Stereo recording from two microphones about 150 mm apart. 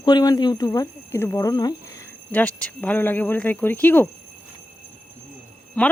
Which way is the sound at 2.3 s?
10° left (ahead or behind).